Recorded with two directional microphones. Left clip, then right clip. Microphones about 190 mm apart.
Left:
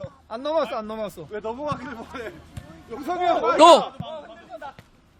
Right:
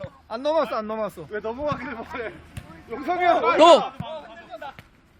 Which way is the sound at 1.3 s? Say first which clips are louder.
Even; 35° right (ahead or behind).